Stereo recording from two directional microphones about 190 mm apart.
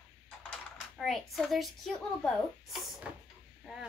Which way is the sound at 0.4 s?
5° left (ahead or behind).